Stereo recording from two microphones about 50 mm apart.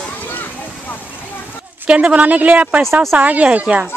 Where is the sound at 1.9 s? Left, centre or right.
Right.